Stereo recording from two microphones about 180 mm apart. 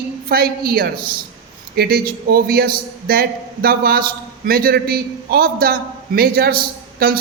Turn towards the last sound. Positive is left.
turn(degrees=-55)  # may be behind; listen again after turning